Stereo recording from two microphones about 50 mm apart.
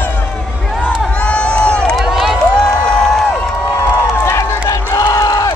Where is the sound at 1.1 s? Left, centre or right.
Left.